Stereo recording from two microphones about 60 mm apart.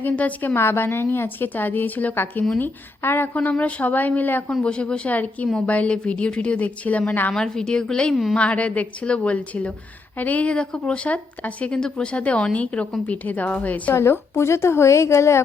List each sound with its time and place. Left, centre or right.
0.0 s a woman's voice: left
0.5 s a woman's voice: left
3.6 s a woman's voice: left
4.6 s a woman's voice: centre
7.3 s a woman's voice: centre
8.1 s a woman's voice: centre
8.4 s a woman's voice: left
13.9 s a woman's voice: left